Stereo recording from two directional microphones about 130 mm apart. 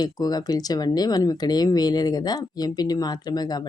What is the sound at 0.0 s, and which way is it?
Speech, 30° left (ahead or behind).